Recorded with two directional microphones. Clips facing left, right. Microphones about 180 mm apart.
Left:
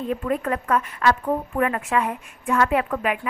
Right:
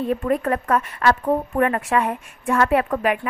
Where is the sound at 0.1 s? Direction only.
45° right (ahead or behind).